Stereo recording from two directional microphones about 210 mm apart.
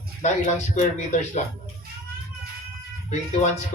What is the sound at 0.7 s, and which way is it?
Speech, 35° left (ahead or behind).